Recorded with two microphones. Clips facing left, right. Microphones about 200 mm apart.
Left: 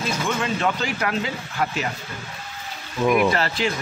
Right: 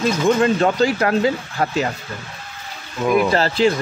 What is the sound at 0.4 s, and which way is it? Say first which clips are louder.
Speech: right 8 dB; 35° right (ahead or behind).